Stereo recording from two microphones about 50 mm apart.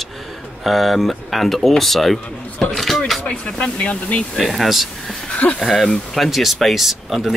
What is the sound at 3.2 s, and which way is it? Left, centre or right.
Speech, left.